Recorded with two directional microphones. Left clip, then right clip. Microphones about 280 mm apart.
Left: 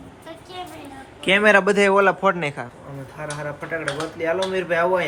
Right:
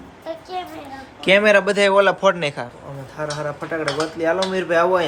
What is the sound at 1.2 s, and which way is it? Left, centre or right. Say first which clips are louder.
A man's voice: right 2 dB; centre.